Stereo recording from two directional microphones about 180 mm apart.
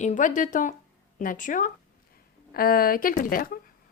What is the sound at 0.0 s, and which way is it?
A woman's voice, 45° left (ahead or behind).